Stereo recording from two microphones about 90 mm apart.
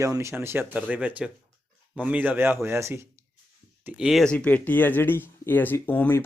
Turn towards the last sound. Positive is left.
turn(degrees=20)  # may be behind; listen again after turning